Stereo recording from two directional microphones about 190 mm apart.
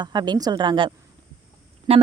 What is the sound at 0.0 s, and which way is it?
A woman's voice, 20° right (ahead or behind).